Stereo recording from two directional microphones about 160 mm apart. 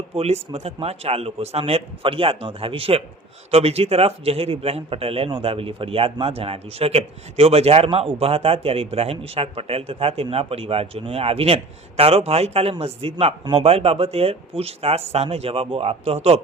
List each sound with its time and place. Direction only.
0.2 s a man's voice: 40° right (ahead or behind)